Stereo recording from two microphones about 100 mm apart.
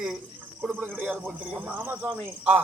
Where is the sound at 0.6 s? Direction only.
15° right (ahead or behind).